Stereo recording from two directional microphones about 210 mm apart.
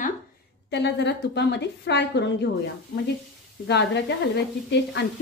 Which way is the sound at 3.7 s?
55° left (ahead or behind).